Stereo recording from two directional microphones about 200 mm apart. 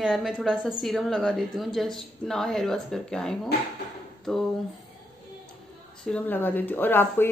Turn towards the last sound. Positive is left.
turn(degrees=10)  # may be behind; listen again after turning